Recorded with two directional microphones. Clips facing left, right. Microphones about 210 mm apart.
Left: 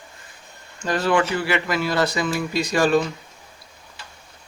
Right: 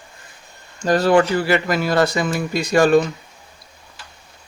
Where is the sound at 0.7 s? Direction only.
40° right (ahead or behind).